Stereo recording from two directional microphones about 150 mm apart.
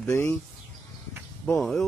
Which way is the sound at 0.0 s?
15° left (ahead or behind).